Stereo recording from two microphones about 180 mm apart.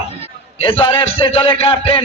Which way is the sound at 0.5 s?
30° left (ahead or behind).